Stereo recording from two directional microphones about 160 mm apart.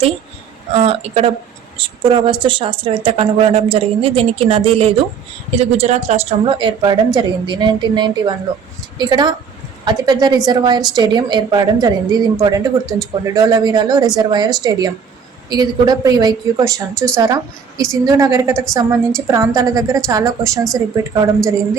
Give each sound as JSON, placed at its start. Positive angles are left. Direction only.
{"t": 0.7, "sound": "a woman's voice", "side_deg": -40}